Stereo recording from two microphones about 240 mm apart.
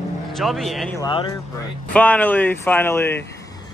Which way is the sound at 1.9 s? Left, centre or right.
Centre.